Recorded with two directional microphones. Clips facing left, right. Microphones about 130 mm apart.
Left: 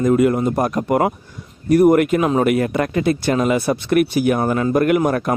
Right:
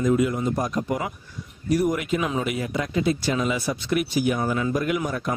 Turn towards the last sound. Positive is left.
turn(degrees=60)  # may be behind; listen again after turning